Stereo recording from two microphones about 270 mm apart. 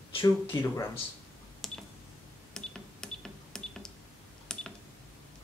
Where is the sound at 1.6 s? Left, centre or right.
Centre.